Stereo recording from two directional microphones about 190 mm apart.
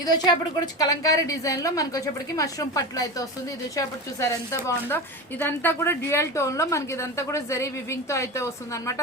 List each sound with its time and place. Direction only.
0.0 s a woman's voice: 20° left (ahead or behind)